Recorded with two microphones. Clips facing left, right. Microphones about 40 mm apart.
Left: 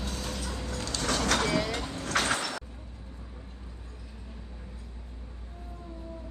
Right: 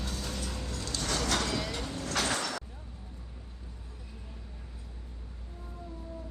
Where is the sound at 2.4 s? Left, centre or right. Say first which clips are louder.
Left 1 dB; left.